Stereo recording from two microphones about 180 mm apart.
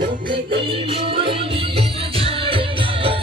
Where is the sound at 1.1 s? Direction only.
30° right (ahead or behind).